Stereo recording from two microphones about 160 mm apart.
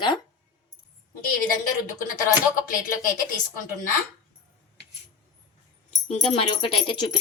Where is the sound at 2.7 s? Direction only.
60° left (ahead or behind).